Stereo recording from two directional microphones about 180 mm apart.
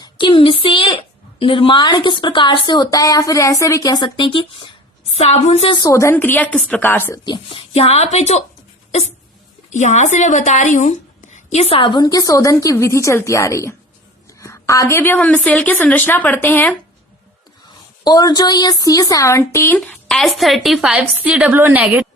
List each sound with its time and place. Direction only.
0.0 s a sound: 25° left (ahead or behind)
1.4 s a woman's voice: 30° left (ahead or behind); by 7.2 s 10° left (ahead or behind)
7.3 s speech: 30° left (ahead or behind)
9.7 s a woman's voice: 40° left (ahead or behind); by 16.7 s 10° left (ahead or behind)
18.0 s a woman's voice: 20° left (ahead or behind); by 22.0 s 10° right (ahead or behind)